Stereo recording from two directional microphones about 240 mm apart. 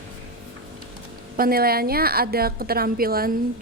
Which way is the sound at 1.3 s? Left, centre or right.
Right.